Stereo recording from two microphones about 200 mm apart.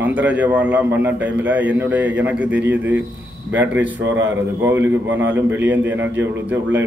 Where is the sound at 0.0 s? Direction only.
5° right (ahead or behind).